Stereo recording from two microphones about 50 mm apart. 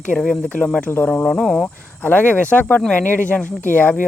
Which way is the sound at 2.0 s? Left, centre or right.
Left.